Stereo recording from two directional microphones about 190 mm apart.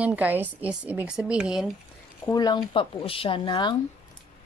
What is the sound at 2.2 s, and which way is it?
Speech, 20° left (ahead or behind).